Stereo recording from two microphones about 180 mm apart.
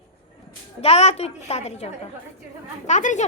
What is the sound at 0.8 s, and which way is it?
A woman's voice, 35° left (ahead or behind).